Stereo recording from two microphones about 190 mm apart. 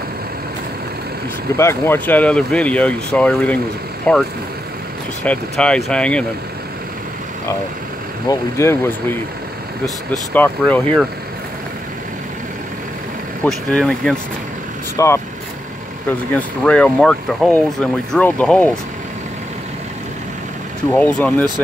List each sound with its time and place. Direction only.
1.6 s speech: 15° left (ahead or behind)
8.3 s speech: 15° left (ahead or behind)
10.1 s speech: 10° left (ahead or behind)
13.4 s speech: 5° left (ahead or behind)
15.0 s speech: 15° left (ahead or behind)
20.9 s speech: 10° left (ahead or behind)